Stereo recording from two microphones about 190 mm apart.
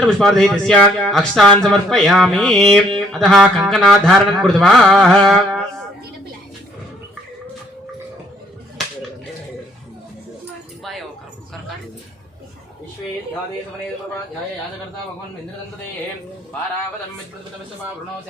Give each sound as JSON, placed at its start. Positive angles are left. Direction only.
{"t": 0.0, "sound": "speech", "side_deg": 5}